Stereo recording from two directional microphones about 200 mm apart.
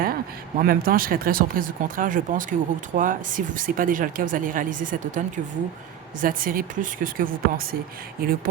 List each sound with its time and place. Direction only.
0.6 s speech: 45° right (ahead or behind)
6.2 s speech: 45° right (ahead or behind)